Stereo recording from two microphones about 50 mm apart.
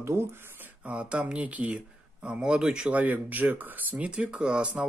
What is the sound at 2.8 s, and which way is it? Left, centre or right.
Speech, right.